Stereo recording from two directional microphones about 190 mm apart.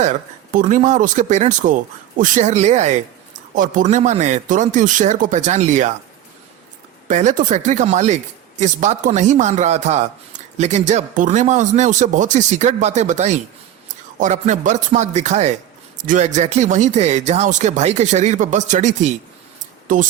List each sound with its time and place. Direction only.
0.5 s speech: 40° right (ahead or behind)
7.1 s speech: 40° right (ahead or behind)